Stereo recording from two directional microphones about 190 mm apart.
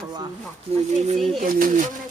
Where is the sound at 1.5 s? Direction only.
45° right (ahead or behind).